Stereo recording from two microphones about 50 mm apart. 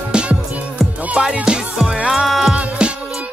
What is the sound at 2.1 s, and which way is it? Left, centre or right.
Music, centre.